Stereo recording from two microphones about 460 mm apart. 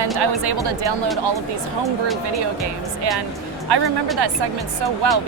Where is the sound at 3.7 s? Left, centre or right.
Right.